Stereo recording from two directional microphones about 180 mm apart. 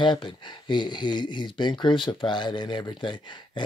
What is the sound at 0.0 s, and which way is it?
Speech, 25° left (ahead or behind).